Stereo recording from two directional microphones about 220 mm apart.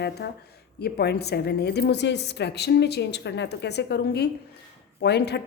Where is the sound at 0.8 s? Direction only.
45° left (ahead or behind).